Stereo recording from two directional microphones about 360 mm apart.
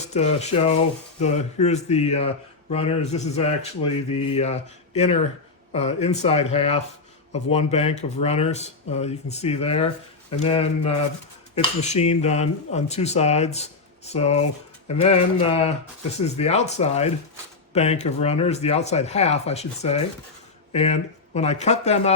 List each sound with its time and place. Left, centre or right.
0.1 s speech: centre